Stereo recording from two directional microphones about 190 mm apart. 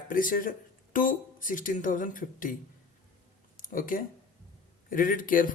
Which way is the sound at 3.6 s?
45° left (ahead or behind).